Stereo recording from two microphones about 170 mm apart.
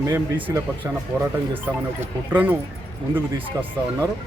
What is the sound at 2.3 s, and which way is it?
Speech, 10° right (ahead or behind).